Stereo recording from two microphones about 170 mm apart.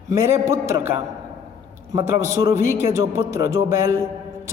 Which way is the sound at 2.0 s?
15° right (ahead or behind).